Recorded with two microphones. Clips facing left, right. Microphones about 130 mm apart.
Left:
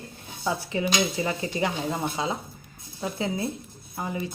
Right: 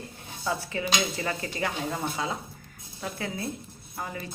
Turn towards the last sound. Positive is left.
turn(degrees=20)  # may be behind; listen again after turning